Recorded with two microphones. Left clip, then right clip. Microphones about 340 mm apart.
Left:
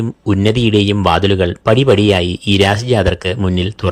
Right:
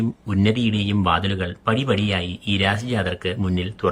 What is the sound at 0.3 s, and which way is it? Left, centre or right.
Speech, centre.